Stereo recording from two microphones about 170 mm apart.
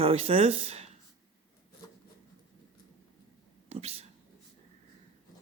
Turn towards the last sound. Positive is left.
turn(degrees=-35)  # may be behind; listen again after turning